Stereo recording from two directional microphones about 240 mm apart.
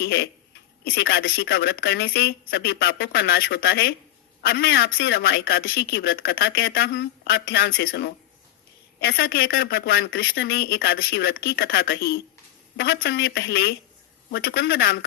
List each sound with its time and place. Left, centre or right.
0.0 s speech: left
10.1 s speech: left